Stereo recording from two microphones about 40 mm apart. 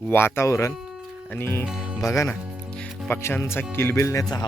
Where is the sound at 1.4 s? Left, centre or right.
Left.